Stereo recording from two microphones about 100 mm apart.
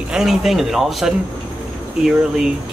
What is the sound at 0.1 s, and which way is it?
Speech, 5° right (ahead or behind).